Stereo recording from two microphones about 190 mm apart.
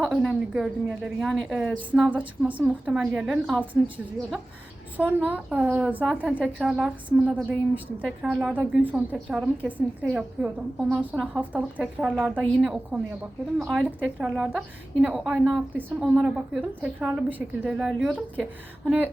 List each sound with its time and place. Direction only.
0.0 s a woman's voice: centre (ahead or behind)
4.9 s a woman's voice: 10° right (ahead or behind)